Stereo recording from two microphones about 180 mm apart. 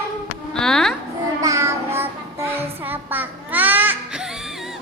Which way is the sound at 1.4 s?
15° right (ahead or behind).